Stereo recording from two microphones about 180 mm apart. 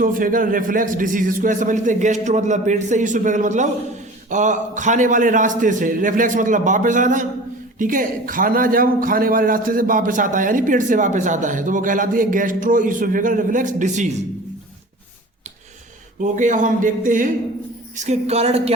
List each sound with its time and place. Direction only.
0.0 s a man's voice: 50° right (ahead or behind)
16.2 s a man's voice: 45° right (ahead or behind)